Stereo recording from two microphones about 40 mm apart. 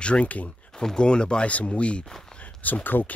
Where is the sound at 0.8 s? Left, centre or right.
Centre.